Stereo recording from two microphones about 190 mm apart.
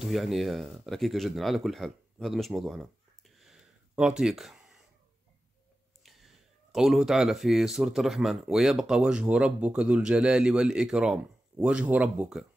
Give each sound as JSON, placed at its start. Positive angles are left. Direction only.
{"t": 0.0, "sound": "speech", "side_deg": 0}
{"t": 6.0, "sound": "speech", "side_deg": 0}